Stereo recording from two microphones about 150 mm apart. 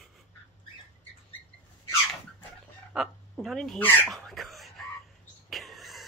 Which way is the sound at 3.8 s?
5° left (ahead or behind).